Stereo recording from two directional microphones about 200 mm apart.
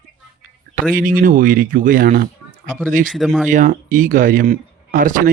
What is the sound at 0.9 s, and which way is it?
Speech, 45° right (ahead or behind).